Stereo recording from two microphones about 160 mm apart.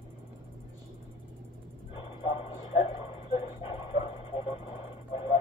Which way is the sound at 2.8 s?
35° left (ahead or behind).